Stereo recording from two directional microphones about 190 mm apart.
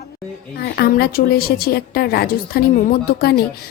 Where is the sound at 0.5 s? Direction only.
55° left (ahead or behind).